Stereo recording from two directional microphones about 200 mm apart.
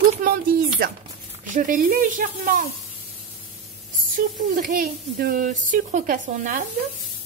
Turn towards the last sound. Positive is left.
turn(degrees=-40)  # may be behind; listen again after turning